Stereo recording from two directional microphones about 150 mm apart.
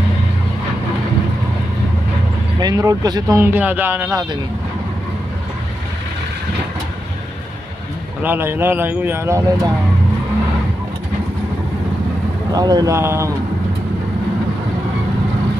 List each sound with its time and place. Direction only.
2.6 s speech: 20° right (ahead or behind)
3.5 s speech: 10° right (ahead or behind)
8.2 s speech: 15° right (ahead or behind)
12.5 s speech: 25° right (ahead or behind)